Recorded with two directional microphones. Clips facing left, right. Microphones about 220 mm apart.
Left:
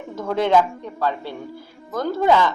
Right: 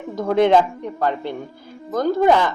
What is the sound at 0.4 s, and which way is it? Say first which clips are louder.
A man's voice: even; 15° right (ahead or behind).